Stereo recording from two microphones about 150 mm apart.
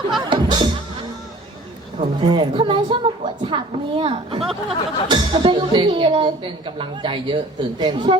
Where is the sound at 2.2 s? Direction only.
35° right (ahead or behind).